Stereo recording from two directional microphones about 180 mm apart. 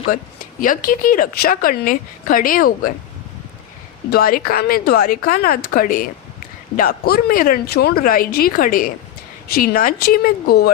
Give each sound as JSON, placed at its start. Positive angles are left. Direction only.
{"t": 0.6, "sound": "speech", "side_deg": 50}
{"t": 4.1, "sound": "speech", "side_deg": 55}